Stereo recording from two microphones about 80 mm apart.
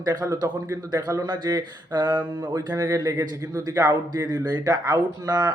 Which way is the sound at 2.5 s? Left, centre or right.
Right.